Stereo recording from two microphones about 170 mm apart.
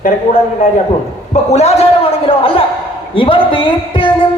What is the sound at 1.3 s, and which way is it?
Speech, 40° left (ahead or behind).